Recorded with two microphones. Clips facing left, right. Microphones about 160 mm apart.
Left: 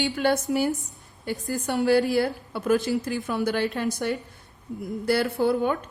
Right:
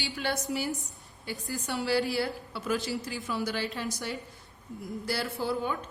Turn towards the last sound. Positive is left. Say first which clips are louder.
# left 8 dB
turn(degrees=60)  # may be behind; listen again after turning